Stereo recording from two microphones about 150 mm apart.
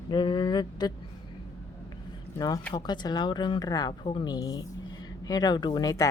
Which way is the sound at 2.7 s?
30° left (ahead or behind).